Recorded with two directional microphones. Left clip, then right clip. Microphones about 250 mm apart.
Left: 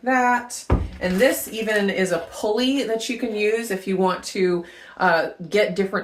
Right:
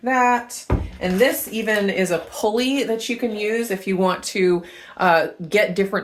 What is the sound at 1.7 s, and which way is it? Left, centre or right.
Speech, right.